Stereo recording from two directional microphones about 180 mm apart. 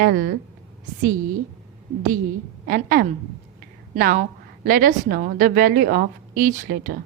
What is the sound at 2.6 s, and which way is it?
A woman's voice, 55° right (ahead or behind).